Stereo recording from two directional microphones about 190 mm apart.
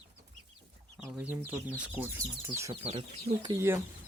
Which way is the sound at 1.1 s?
10° right (ahead or behind).